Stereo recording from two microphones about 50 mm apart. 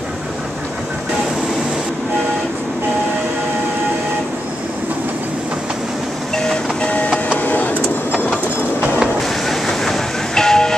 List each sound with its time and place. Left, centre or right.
6.3 s train: centre
7.4 s vehicle: left
9.5 s train: centre